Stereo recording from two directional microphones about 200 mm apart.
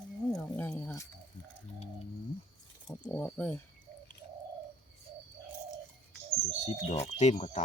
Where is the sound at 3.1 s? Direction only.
10° left (ahead or behind).